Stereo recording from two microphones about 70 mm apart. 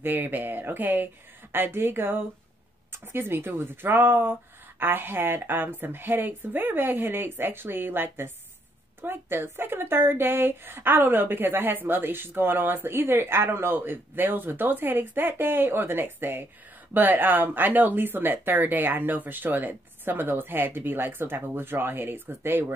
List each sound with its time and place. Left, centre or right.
0.0 s a woman's voice: right